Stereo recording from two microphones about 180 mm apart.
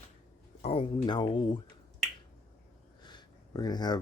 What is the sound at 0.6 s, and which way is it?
Speech, 30° left (ahead or behind).